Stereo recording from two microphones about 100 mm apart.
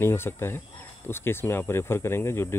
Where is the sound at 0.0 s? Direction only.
25° left (ahead or behind).